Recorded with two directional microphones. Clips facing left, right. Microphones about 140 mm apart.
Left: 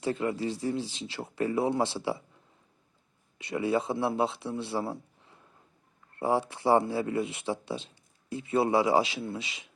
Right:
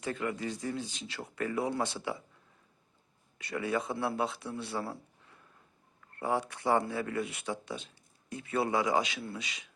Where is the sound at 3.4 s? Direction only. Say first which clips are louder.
Left 5 dB; 25° left (ahead or behind).